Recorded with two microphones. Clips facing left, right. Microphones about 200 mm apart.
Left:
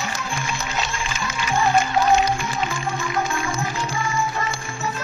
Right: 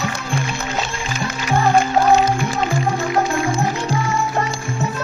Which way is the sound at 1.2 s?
55° right (ahead or behind).